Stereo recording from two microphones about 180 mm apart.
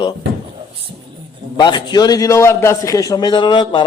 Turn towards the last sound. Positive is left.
turn(degrees=25)  # may be behind; listen again after turning